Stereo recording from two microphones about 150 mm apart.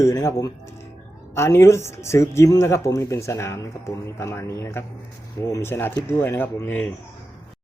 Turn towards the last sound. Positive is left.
turn(degrees=10)  # may be behind; listen again after turning